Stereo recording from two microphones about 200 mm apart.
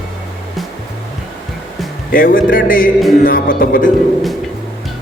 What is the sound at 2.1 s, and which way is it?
Speech, 45° left (ahead or behind).